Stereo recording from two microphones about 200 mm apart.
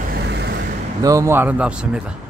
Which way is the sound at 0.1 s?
55° right (ahead or behind).